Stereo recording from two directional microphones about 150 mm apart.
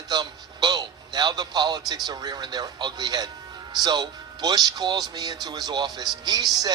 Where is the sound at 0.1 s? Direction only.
30° right (ahead or behind).